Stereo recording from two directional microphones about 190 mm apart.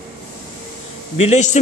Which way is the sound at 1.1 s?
35° left (ahead or behind).